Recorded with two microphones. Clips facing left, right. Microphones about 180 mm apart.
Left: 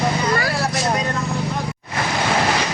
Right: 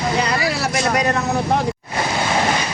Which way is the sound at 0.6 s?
75° right (ahead or behind).